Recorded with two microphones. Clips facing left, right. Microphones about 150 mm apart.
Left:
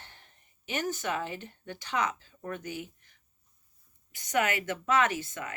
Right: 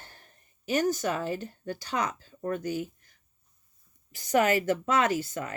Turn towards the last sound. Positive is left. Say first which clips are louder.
# right 2 dB
turn(degrees=-35)  # may be behind; listen again after turning